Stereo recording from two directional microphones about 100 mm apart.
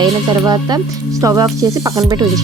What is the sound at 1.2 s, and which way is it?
Speech, 35° right (ahead or behind).